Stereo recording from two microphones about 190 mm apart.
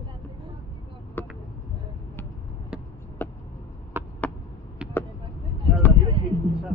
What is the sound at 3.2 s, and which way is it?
Vehicle, 10° left (ahead or behind).